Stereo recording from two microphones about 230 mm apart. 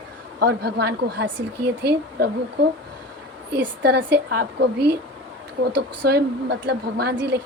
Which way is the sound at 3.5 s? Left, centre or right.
Right.